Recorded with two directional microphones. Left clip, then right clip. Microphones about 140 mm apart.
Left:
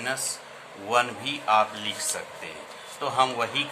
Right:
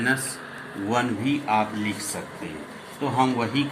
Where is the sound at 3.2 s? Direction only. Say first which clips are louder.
Even; 30° left (ahead or behind).